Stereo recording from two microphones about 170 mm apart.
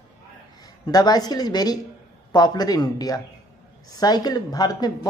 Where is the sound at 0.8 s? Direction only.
25° left (ahead or behind).